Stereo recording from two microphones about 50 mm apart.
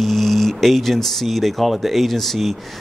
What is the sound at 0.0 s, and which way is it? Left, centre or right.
Speech, centre.